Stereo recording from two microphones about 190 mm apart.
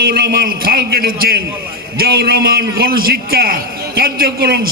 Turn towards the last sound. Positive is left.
turn(degrees=-50)  # may be behind; listen again after turning